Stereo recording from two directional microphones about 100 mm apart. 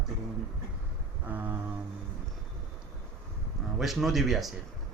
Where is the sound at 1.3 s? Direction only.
20° right (ahead or behind).